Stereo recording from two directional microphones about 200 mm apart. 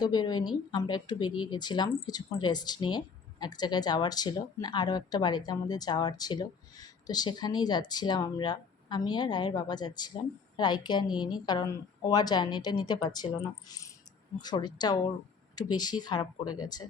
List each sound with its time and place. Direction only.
0.0 s speech: 20° left (ahead or behind)
14.3 s speech: 20° left (ahead or behind)